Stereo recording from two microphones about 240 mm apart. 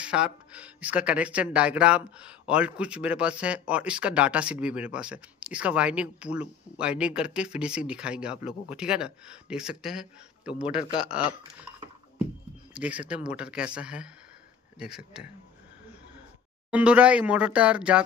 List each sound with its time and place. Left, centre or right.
0.0 s speech: centre
12.7 s speech: centre
16.7 s speech: centre